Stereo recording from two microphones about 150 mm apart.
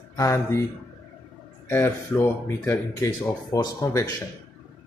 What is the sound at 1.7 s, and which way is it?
Speech, 15° left (ahead or behind).